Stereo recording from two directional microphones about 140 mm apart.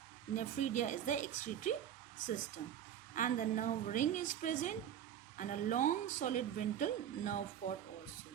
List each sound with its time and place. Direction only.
0.3 s speech: 65° left (ahead or behind)
3.2 s a woman's voice: 70° left (ahead or behind)